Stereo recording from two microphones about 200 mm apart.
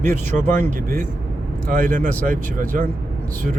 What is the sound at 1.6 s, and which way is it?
Speech, 45° right (ahead or behind).